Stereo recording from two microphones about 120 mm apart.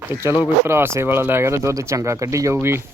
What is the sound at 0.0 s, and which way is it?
Speech, 20° right (ahead or behind).